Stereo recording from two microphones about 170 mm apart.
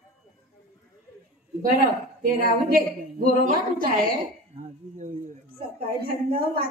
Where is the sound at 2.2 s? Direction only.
60° right (ahead or behind).